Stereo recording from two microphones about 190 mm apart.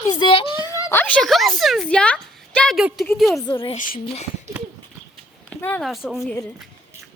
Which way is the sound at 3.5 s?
25° left (ahead or behind).